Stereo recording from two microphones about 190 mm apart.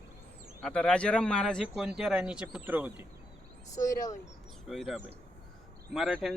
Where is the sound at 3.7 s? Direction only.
15° left (ahead or behind).